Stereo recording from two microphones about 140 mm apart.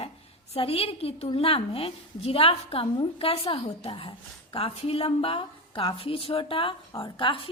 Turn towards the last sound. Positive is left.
turn(degrees=40)  # may be behind; listen again after turning